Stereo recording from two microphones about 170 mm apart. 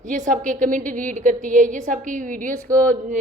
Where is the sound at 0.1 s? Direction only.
50° right (ahead or behind).